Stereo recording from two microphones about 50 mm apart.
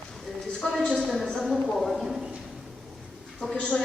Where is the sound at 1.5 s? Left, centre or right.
Centre.